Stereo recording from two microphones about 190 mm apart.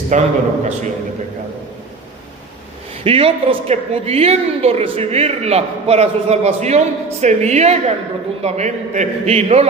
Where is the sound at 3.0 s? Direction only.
30° right (ahead or behind).